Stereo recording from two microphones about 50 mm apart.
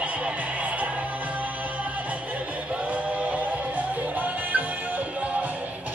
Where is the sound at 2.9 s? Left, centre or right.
Right.